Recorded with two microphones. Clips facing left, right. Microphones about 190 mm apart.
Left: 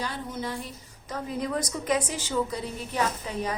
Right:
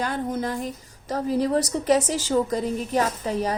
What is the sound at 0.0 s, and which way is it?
A woman's voice, 50° right (ahead or behind).